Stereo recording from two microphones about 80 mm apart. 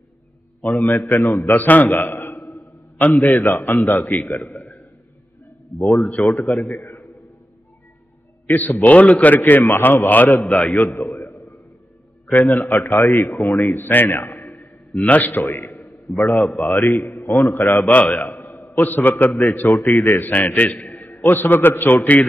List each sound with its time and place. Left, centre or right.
0.6 s a man's voice: left
8.5 s a man's voice: left
13.3 s speech: left
13.6 s a man's voice: left
17.8 s a man's voice: centre
18.1 s a man's voice: left
20.7 s a sound: left
21.3 s a man's voice: left